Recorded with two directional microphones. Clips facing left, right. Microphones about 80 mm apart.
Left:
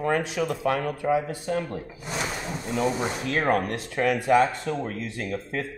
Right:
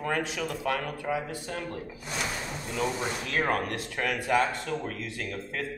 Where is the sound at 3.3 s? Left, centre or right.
Left.